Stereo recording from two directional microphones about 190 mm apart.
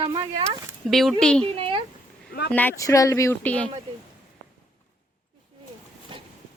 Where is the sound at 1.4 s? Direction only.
30° right (ahead or behind).